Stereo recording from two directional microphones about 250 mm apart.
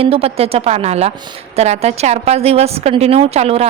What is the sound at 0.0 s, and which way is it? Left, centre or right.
A woman's voice, right.